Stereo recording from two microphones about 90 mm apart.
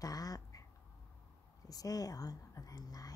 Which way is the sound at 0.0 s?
45° left (ahead or behind).